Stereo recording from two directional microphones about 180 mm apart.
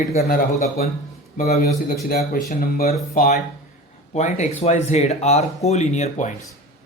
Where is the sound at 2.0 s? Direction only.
50° left (ahead or behind).